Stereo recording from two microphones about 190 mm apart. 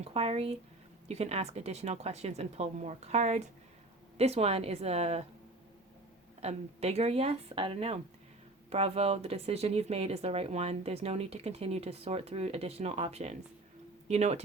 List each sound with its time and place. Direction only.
0.0 s speech: 30° right (ahead or behind)
6.4 s speech: 35° right (ahead or behind)